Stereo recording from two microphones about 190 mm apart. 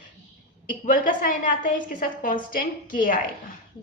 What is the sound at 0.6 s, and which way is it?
A woman's voice, 45° left (ahead or behind).